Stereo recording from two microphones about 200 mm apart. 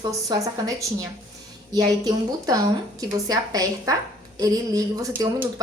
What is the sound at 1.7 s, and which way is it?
A woman's voice, 20° right (ahead or behind).